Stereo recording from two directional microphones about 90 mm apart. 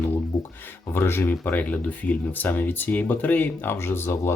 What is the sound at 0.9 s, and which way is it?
Speech, 25° left (ahead or behind).